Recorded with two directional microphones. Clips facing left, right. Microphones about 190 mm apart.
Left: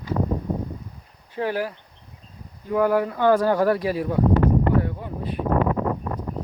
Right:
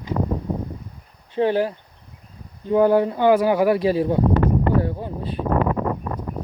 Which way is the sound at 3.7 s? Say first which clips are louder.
Right 5 dB; 25° right (ahead or behind).